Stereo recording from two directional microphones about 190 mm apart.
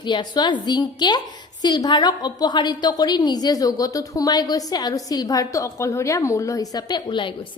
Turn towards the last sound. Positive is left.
turn(degrees=25)  # may be behind; listen again after turning